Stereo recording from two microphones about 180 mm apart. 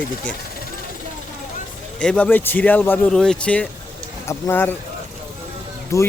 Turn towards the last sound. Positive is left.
turn(degrees=15)  # may be behind; listen again after turning